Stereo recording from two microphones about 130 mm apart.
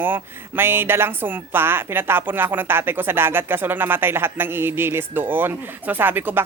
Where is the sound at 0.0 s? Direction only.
15° right (ahead or behind).